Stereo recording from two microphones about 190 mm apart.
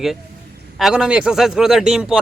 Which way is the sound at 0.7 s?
Centre (ahead or behind).